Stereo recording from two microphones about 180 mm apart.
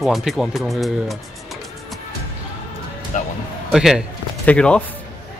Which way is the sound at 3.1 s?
45° left (ahead or behind).